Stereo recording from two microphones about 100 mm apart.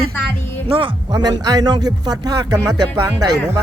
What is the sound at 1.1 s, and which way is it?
Speech, 40° right (ahead or behind).